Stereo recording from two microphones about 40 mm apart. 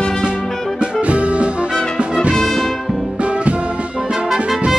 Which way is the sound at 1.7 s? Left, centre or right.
Left.